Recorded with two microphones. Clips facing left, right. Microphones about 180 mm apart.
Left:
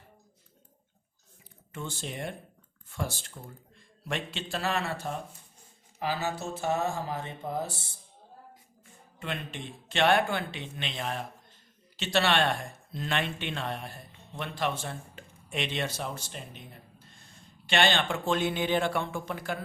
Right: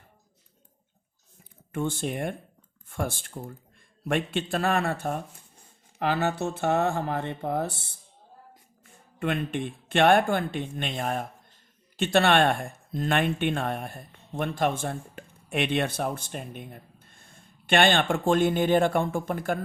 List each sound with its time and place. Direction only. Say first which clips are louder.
1.7 s speech: right 9 dB; 55° right (ahead or behind)
9.1 s speech: right 9 dB; 55° right (ahead or behind)